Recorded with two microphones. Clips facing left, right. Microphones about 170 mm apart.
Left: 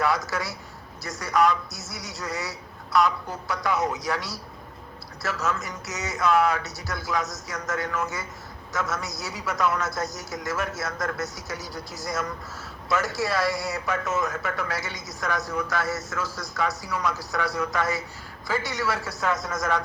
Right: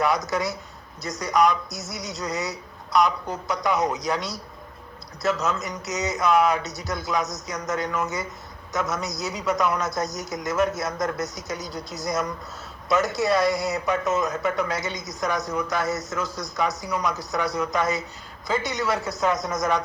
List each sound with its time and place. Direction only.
0.0 s a man's voice: 20° right (ahead or behind)